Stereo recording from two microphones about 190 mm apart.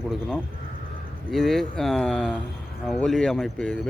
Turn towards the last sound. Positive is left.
turn(degrees=5)  # may be behind; listen again after turning